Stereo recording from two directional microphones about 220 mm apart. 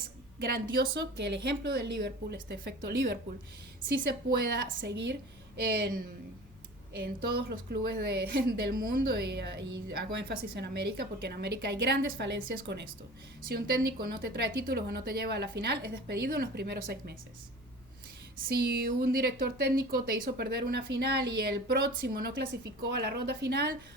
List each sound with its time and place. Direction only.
0.9 s a woman's voice: 50° right (ahead or behind)
4.3 s a woman's voice: 45° right (ahead or behind)
6.9 s a woman's voice: 45° right (ahead or behind)
18.5 s a woman's voice: 45° right (ahead or behind)